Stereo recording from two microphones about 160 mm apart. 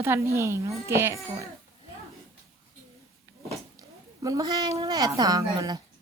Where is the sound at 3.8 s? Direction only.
20° right (ahead or behind).